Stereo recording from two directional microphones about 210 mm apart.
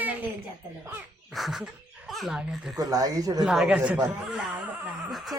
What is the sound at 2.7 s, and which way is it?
Speech, 15° right (ahead or behind).